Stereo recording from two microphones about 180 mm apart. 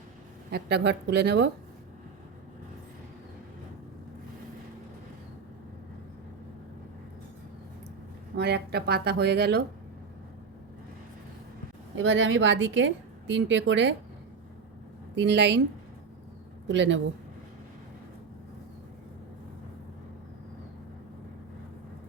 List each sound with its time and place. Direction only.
0.5 s speech: 70° right (ahead or behind)
8.4 s speech: 65° right (ahead or behind)
11.9 s a woman's voice: 90° right
15.1 s speech: 75° right (ahead or behind)
16.6 s speech: 80° right